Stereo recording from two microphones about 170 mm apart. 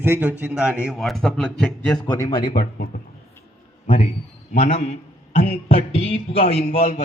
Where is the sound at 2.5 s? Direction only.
60° left (ahead or behind).